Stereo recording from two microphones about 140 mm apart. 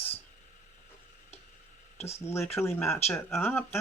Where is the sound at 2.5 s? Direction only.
20° left (ahead or behind).